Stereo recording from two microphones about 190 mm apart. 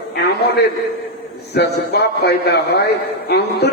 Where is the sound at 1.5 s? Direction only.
60° left (ahead or behind).